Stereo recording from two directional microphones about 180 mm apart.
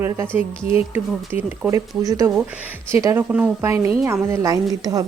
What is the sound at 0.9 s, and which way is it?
A woman's voice, 10° right (ahead or behind).